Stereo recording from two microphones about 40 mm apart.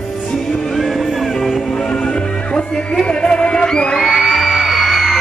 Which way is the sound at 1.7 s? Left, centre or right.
Centre.